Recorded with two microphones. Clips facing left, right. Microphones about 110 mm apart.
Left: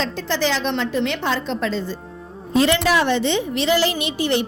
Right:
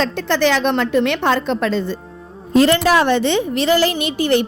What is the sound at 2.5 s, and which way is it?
A woman's voice, 45° right (ahead or behind).